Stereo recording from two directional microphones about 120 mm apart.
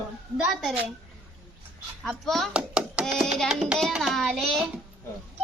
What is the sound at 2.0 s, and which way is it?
A child's voice, centre (ahead or behind).